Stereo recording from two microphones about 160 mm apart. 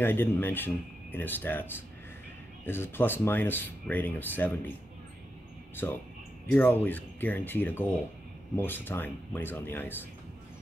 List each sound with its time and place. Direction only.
0.0 s speech: 15° left (ahead or behind)
6.4 s speech: 10° left (ahead or behind)